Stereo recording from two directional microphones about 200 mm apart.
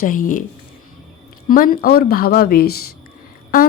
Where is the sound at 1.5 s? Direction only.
45° left (ahead or behind).